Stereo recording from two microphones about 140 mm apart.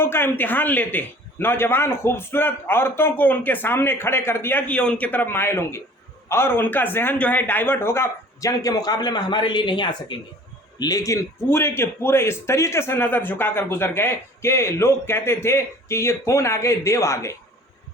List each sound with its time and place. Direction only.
0.0 s a man's voice: 15° left (ahead or behind)